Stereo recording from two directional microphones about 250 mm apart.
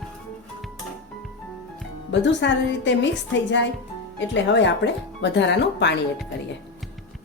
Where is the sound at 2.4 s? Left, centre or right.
Left.